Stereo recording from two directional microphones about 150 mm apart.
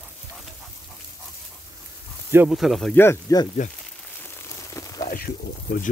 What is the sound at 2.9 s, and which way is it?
Speech, 15° left (ahead or behind).